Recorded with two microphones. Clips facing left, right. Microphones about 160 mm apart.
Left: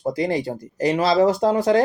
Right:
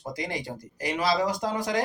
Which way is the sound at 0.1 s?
35° left (ahead or behind).